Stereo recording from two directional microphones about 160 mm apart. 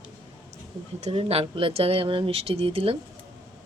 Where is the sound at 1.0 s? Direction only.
35° right (ahead or behind).